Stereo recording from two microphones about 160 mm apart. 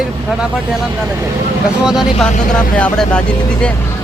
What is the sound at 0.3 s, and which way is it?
Speech, 5° right (ahead or behind).